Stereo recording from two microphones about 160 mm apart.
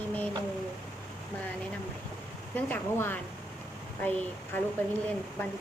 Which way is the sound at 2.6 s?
10° left (ahead or behind).